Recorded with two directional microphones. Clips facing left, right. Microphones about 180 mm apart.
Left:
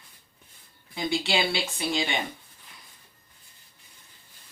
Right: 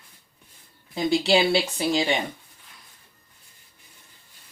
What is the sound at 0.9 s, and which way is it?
Speech, 35° right (ahead or behind).